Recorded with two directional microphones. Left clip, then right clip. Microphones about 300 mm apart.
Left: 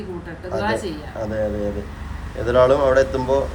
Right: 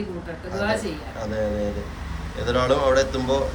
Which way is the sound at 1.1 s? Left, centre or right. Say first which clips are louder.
Left 4 dB; centre.